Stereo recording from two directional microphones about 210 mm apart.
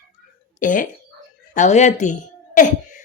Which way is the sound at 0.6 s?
40° left (ahead or behind).